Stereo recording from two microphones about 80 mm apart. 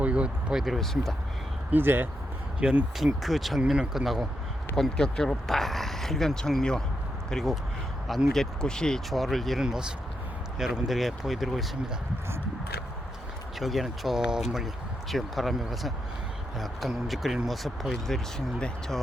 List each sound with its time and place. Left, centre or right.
0.0 s speech: centre
1.7 s speech: right
2.6 s speech: centre
3.2 s speech: centre
4.7 s speech: centre
13.6 s speech: centre